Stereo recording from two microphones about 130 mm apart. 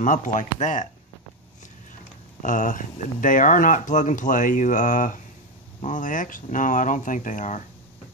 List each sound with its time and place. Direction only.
0.0 s speech: 80° left
2.4 s speech: 80° left